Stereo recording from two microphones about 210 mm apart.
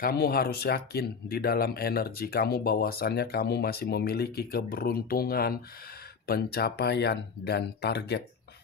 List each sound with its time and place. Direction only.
0.0 s speech: 45° left (ahead or behind)